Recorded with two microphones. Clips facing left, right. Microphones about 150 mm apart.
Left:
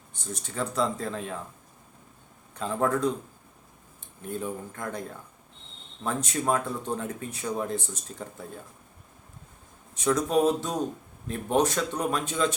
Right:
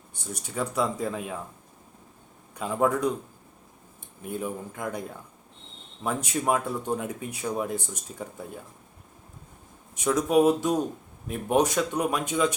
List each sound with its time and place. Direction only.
0.1 s speech: 10° right (ahead or behind)
2.6 s speech: 10° right (ahead or behind)
4.2 s speech: 10° right (ahead or behind)
9.9 s speech: 10° right (ahead or behind)